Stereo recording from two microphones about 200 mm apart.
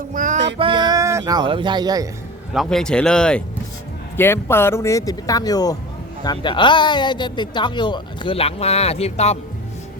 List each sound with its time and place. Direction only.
0.1 s music: 40° right (ahead or behind)
0.6 s speech: 20° right (ahead or behind)
2.5 s speech: centre (ahead or behind); by 9.4 s 30° left (ahead or behind)